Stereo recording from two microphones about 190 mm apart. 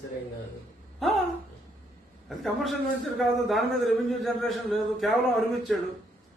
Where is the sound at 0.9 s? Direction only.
Centre (ahead or behind).